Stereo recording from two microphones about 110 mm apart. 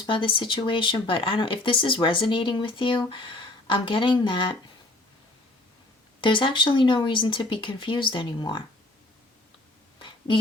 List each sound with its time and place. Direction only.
0.0 s speech: 50° left (ahead or behind)
6.2 s speech: 50° left (ahead or behind)
10.0 s a sound: 50° left (ahead or behind)